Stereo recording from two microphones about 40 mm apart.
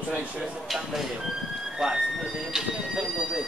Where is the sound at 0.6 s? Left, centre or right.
Centre.